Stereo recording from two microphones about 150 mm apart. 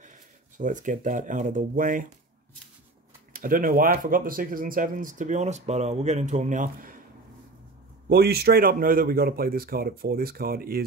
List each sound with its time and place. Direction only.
0.0 s speech: 55° right (ahead or behind)
3.3 s speech: 70° right (ahead or behind)
8.1 s speech: 90° right